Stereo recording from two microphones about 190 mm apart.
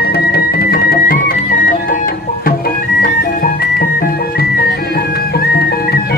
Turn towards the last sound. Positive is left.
turn(degrees=55)  # may be behind; listen again after turning